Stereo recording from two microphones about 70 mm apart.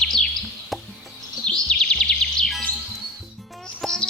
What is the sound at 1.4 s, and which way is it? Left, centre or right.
Bird vocalization, centre.